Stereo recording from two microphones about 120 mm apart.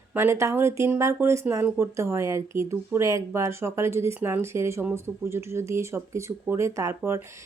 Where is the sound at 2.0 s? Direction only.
25° right (ahead or behind).